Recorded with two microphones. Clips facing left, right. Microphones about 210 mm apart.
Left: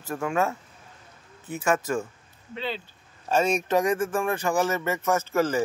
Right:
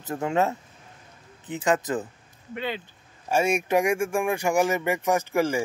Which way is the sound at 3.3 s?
10° right (ahead or behind).